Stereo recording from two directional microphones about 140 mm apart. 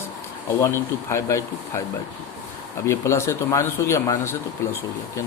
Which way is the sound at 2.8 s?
20° left (ahead or behind).